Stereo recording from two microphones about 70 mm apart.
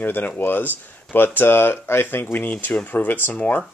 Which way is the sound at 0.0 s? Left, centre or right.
Left.